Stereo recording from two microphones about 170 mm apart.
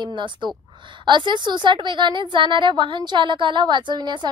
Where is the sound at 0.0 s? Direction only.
30° right (ahead or behind).